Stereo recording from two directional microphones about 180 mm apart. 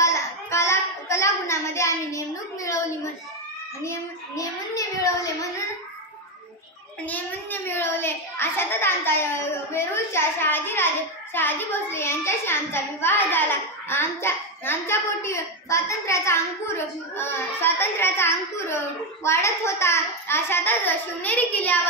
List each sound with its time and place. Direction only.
0.0 s a sound: 15° left (ahead or behind)
4.4 s a child's voice: 20° left (ahead or behind)
7.1 s a child's voice: 10° left (ahead or behind)